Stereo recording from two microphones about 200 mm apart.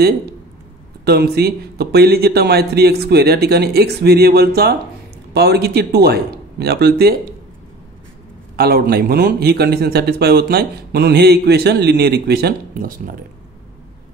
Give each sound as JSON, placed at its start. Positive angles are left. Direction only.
{"t": 1.0, "sound": "a man's voice", "side_deg": -50}
{"t": 8.5, "sound": "a man's voice", "side_deg": -50}